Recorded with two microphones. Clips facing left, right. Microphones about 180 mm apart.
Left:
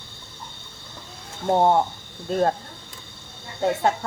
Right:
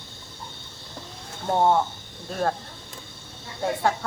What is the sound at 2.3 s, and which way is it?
Speech, 25° left (ahead or behind).